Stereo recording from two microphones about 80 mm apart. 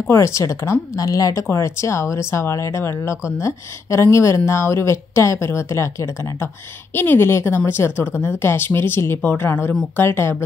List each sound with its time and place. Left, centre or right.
0.1 s speech: left
6.9 s speech: left